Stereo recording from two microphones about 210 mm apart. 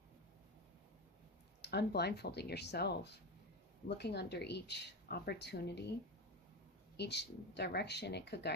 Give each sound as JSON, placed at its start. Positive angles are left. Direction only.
{"t": 1.6, "sound": "speech", "side_deg": 50}
{"t": 6.9, "sound": "speech", "side_deg": 55}